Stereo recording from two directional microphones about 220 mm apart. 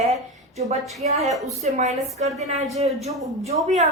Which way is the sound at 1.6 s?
35° right (ahead or behind).